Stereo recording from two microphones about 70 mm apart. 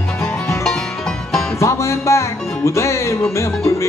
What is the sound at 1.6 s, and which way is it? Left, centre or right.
Music, left.